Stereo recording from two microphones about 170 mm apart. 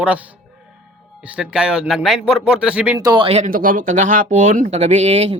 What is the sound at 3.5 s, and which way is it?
Speech, 55° right (ahead or behind).